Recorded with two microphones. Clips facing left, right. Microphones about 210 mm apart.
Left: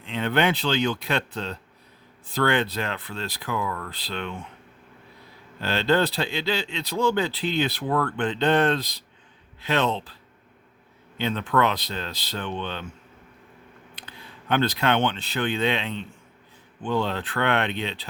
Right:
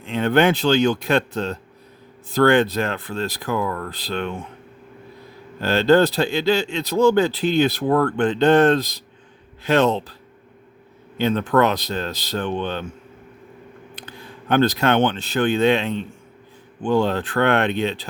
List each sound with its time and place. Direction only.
0.0 s speech: 45° right (ahead or behind)
5.5 s speech: 45° right (ahead or behind)
11.2 s speech: 45° right (ahead or behind)
13.9 s speech: 45° right (ahead or behind)